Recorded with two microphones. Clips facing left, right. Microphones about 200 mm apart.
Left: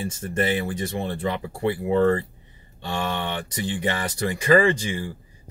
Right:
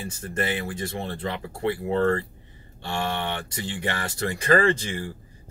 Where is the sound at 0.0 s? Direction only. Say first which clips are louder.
Left 4 dB; 25° left (ahead or behind).